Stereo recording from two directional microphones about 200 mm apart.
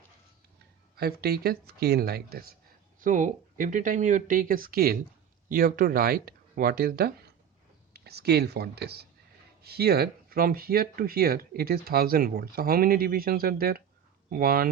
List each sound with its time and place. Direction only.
0.9 s speech: 50° right (ahead or behind)
3.0 s speech: 40° right (ahead or behind)